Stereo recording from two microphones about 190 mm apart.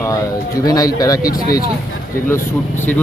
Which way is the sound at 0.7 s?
20° left (ahead or behind).